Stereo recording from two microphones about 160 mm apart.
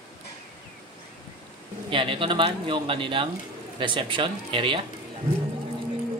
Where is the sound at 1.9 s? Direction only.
35° right (ahead or behind).